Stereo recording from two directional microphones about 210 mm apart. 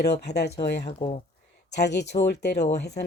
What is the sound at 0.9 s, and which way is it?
Speech, 25° left (ahead or behind).